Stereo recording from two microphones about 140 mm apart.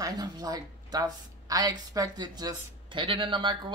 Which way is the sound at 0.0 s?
25° right (ahead or behind).